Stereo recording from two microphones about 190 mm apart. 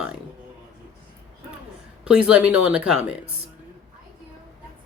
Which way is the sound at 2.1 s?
5° right (ahead or behind).